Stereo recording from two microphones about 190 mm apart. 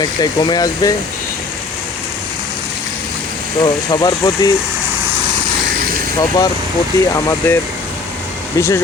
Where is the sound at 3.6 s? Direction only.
20° left (ahead or behind).